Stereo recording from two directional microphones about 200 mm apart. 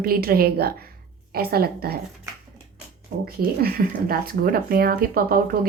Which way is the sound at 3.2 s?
50° right (ahead or behind).